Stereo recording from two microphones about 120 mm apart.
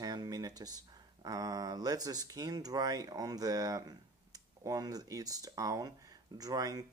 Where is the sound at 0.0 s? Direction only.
30° right (ahead or behind).